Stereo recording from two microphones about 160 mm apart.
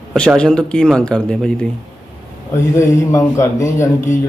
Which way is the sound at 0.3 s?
5° left (ahead or behind).